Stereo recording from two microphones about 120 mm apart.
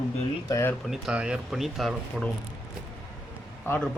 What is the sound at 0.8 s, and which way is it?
Speech, 5° right (ahead or behind).